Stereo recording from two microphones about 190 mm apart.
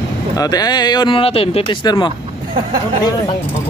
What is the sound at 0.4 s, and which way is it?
Speech, 20° left (ahead or behind).